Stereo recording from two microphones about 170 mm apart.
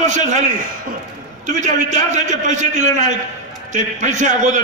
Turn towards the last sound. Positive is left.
turn(degrees=-45)  # may be behind; listen again after turning